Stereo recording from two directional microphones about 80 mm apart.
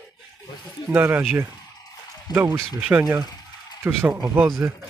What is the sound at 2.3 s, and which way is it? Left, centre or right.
Speech, right.